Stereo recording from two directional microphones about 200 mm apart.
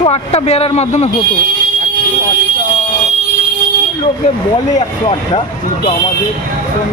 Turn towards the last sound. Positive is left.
turn(degrees=30)  # may be behind; listen again after turning